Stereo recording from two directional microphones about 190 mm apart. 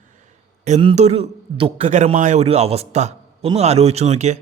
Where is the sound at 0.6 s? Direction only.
30° right (ahead or behind).